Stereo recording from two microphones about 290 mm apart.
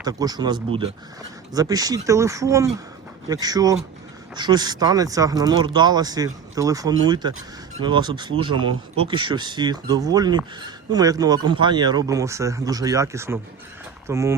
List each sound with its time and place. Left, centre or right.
0.0 s speech: centre